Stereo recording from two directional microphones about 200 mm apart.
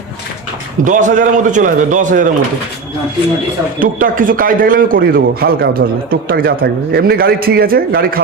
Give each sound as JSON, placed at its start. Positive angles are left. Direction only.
{"t": 0.9, "sound": "a man's voice", "side_deg": -40}
{"t": 3.8, "sound": "speech", "side_deg": -45}